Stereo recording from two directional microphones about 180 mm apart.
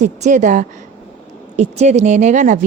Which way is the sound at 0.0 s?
40° right (ahead or behind).